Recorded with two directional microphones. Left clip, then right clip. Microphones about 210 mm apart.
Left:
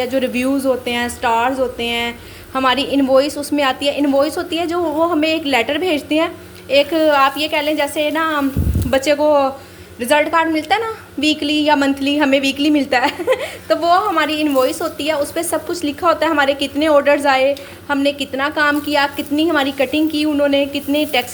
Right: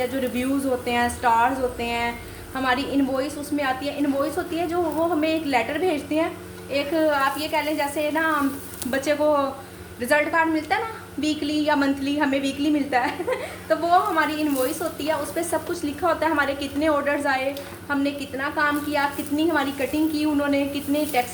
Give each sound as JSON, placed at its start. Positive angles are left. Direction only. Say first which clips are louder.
{"t": 0.0, "sound": "a woman's voice", "louder": "left 7 dB", "side_deg": 40}